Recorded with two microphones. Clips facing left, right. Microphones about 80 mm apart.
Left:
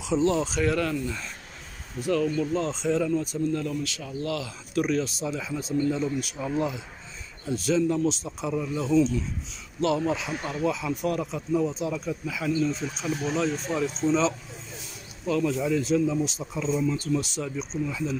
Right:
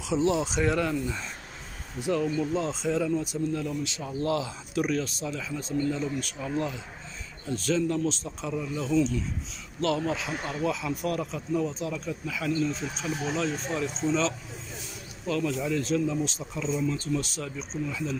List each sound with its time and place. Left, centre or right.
0.0 s speech: centre
3.8 s speech: right
4.7 s speech: centre